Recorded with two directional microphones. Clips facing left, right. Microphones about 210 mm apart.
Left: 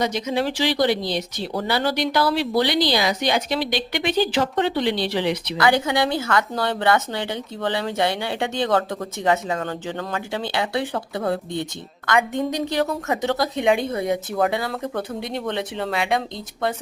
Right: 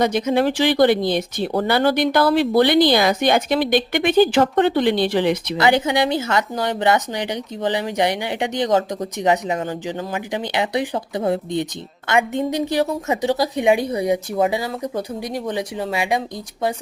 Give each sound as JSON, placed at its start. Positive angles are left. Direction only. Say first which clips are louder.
{"t": 0.0, "sound": "speech", "louder": "right 5 dB", "side_deg": -55}
{"t": 5.5, "sound": "speech", "louder": "right 1 dB", "side_deg": -20}
{"t": 14.4, "sound": "speech", "louder": "right 2 dB", "side_deg": -5}